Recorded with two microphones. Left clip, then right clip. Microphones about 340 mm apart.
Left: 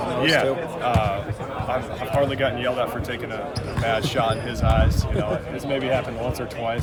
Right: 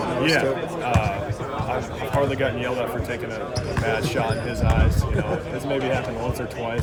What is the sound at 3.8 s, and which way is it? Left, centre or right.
Speech, centre.